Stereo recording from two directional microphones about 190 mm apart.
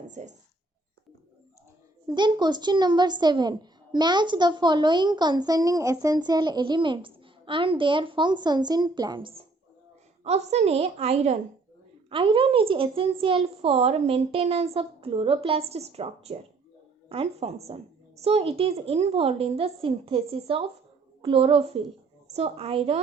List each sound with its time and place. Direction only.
0.1 s a woman's voice: 40° right (ahead or behind)
2.0 s a woman's voice: 25° right (ahead or behind)